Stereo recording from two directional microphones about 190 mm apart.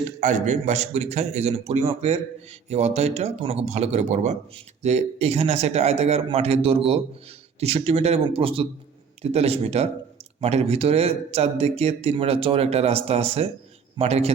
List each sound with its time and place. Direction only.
0.2 s a man's voice: 40° right (ahead or behind)